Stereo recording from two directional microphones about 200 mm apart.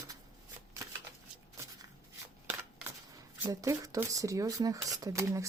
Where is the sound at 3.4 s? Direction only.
15° right (ahead or behind).